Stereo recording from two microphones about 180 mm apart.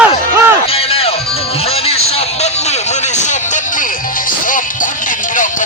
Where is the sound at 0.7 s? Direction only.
30° left (ahead or behind).